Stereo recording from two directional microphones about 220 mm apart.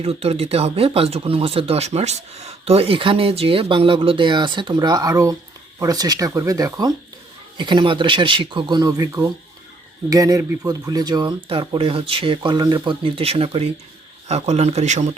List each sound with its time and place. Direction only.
0.0 s speech: 25° right (ahead or behind)